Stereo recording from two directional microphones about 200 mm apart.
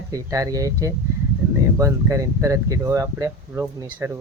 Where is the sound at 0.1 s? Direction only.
15° right (ahead or behind).